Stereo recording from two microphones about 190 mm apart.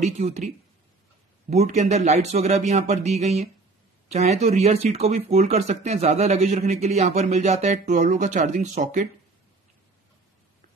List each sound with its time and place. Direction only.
0.0 s speech: 35° right (ahead or behind)
1.5 s speech: 35° right (ahead or behind)